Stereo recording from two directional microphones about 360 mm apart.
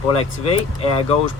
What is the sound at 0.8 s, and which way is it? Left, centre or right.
Speech, centre.